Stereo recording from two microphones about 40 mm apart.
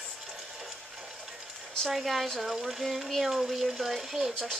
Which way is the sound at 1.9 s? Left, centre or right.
Centre.